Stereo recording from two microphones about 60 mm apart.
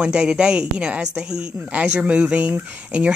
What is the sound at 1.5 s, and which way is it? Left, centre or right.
Speech, right.